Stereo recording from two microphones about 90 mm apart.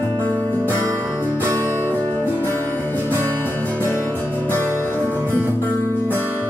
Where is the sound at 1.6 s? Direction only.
25° left (ahead or behind).